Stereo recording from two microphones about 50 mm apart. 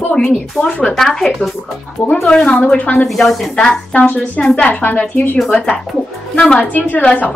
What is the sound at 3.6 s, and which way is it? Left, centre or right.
Speech, centre.